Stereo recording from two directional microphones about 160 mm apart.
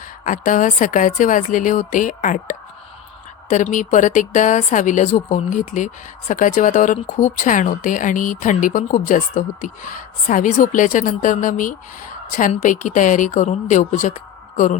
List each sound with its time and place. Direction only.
0.3 s speech: 55° left (ahead or behind)